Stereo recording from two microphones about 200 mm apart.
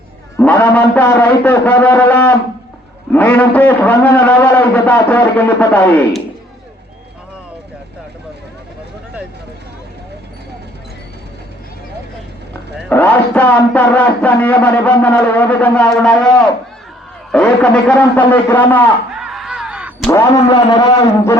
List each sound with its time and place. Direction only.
0.3 s a man's voice: 10° left (ahead or behind)
12.9 s a man's voice: 10° left (ahead or behind)
17.3 s a man's voice: 5° left (ahead or behind)
19.1 s a sound: centre (ahead or behind)
20.5 s a man's voice: 20° left (ahead or behind)